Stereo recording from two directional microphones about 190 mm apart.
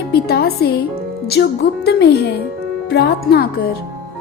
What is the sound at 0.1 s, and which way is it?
Music, 55° left (ahead or behind).